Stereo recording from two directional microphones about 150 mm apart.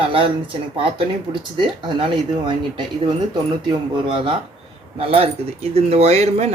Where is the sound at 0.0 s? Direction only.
35° right (ahead or behind).